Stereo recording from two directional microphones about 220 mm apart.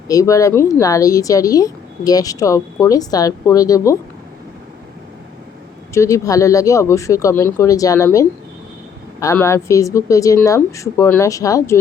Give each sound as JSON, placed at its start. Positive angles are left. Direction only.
{"t": 0.1, "sound": "speech", "side_deg": 15}
{"t": 5.9, "sound": "speech", "side_deg": 15}